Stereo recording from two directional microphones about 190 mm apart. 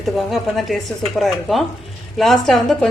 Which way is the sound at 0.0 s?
Centre (ahead or behind).